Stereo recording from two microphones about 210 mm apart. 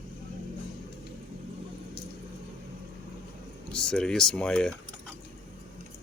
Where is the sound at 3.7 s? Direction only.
5° left (ahead or behind).